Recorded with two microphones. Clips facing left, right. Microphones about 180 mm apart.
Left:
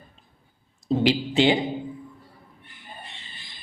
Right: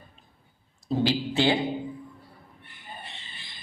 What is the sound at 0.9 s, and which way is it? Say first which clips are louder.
Speech: left 3 dB; 20° left (ahead or behind).